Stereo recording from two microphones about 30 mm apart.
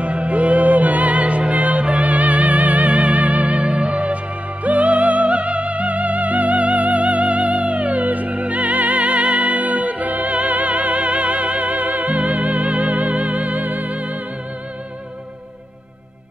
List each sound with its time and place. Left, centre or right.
0.0 s music: right
3.6 s music: right